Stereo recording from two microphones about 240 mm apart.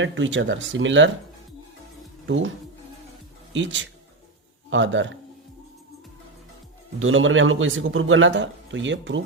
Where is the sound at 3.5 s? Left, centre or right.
Right.